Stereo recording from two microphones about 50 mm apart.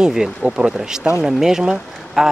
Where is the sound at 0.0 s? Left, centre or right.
Centre.